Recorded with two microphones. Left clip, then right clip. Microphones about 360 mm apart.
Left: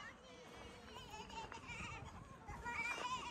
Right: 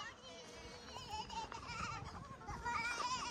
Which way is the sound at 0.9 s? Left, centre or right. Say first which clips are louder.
Right 8 dB; right.